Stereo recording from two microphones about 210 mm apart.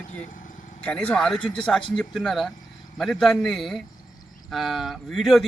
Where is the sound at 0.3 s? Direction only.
40° left (ahead or behind).